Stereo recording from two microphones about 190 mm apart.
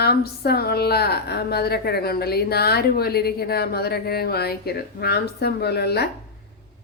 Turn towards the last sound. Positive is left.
turn(degrees=60)  # may be behind; listen again after turning